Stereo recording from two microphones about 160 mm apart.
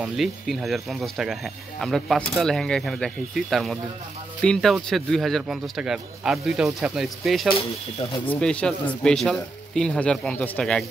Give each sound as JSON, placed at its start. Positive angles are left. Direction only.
{"t": 0.0, "sound": "speech", "side_deg": 0}
{"t": 7.5, "sound": "speech", "side_deg": 35}
{"t": 8.4, "sound": "speech", "side_deg": 5}